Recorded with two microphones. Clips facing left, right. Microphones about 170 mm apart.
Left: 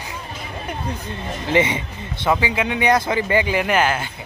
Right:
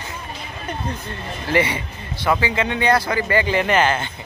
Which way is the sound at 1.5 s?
20° left (ahead or behind).